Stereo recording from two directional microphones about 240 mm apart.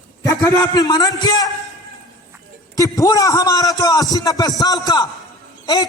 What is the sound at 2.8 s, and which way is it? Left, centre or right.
A man's voice, centre.